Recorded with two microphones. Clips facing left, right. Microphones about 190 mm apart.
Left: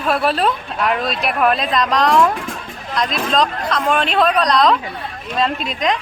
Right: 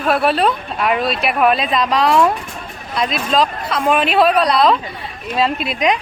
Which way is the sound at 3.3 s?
5° right (ahead or behind).